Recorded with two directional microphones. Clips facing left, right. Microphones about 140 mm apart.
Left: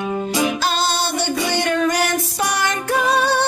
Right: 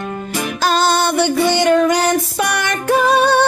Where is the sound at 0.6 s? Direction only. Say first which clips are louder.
Right 6 dB; 45° right (ahead or behind).